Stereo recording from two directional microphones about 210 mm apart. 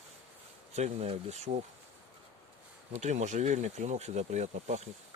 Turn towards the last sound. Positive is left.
turn(degrees=-35)  # may be behind; listen again after turning